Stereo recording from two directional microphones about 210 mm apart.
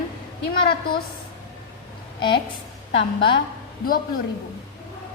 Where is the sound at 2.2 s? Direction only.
20° left (ahead or behind).